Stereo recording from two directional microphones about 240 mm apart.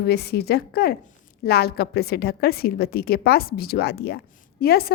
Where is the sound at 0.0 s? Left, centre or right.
Left.